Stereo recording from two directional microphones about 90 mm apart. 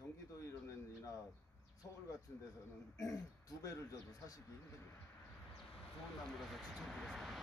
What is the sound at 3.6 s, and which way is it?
Speech, 35° left (ahead or behind).